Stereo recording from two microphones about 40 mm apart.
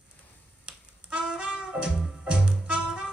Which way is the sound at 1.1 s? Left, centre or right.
Right.